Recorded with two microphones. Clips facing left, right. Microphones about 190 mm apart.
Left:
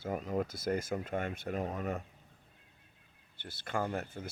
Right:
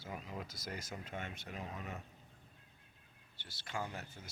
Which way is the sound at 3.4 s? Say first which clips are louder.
Left 7 dB; 55° left (ahead or behind).